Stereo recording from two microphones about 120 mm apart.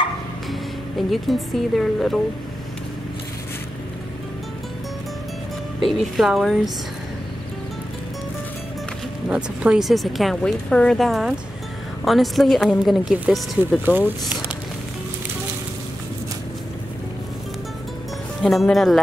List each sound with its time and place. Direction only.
0.5 s speech: centre (ahead or behind)
5.9 s speech: centre (ahead or behind)
9.3 s speech: 10° right (ahead or behind)
13.8 s speech: 15° right (ahead or behind)
18.4 s speech: centre (ahead or behind)